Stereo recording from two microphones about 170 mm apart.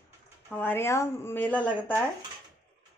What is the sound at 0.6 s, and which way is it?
A woman's voice, 15° left (ahead or behind).